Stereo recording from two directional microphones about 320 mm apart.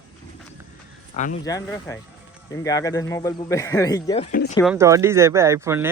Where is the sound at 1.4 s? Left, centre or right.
Centre.